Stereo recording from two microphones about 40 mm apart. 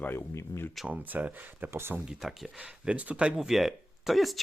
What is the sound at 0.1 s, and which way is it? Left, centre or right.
Speech, left.